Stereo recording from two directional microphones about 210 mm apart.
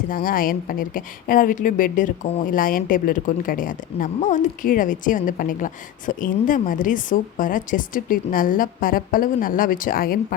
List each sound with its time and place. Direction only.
0.1 s a woman's voice: 45° left (ahead or behind)